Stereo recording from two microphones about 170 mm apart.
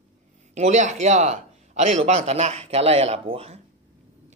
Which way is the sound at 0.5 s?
40° right (ahead or behind).